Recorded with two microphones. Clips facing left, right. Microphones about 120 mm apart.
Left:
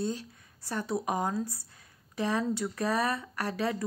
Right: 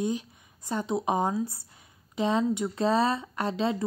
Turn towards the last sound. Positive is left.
turn(degrees=-20)  # may be behind; listen again after turning